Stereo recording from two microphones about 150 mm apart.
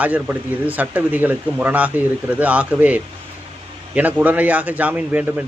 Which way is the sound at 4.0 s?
10° right (ahead or behind).